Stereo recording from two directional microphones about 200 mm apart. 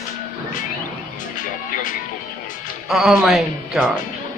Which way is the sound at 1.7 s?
40° left (ahead or behind).